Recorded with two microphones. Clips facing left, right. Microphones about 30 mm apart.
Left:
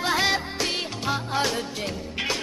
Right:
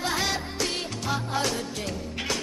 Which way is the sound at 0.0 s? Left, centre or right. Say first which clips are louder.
Left 4 dB; left.